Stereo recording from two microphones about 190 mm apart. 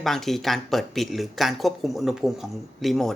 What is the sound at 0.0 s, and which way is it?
Speech, centre (ahead or behind).